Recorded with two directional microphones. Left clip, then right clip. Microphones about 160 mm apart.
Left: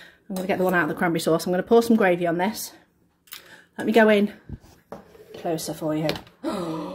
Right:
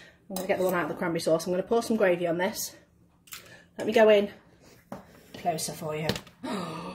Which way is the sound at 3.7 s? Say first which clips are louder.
Left 2 dB; 65° left (ahead or behind).